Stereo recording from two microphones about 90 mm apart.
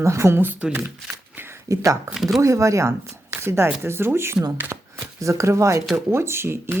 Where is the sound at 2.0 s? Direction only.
5° right (ahead or behind).